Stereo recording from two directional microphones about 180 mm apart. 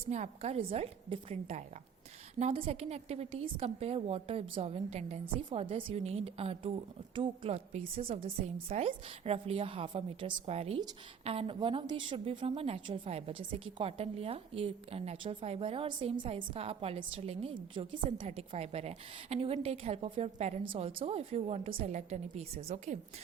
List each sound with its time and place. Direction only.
0.1 s a woman's voice: 40° right (ahead or behind)